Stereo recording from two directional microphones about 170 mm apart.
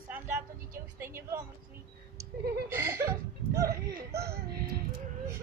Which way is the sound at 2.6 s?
15° right (ahead or behind).